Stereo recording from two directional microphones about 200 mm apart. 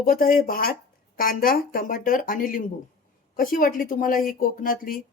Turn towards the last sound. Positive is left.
turn(degrees=45)  # may be behind; listen again after turning